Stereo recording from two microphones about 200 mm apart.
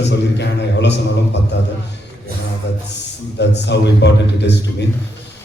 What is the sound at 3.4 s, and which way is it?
A man's voice, 60° left (ahead or behind).